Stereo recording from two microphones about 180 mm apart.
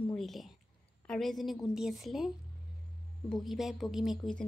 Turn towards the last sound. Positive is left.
turn(degrees=0)  # may be behind; listen again after turning